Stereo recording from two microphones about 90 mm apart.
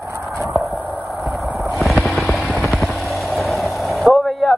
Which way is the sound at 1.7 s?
Centre (ahead or behind).